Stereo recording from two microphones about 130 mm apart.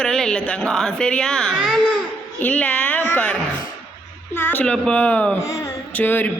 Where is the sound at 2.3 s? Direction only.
10° left (ahead or behind).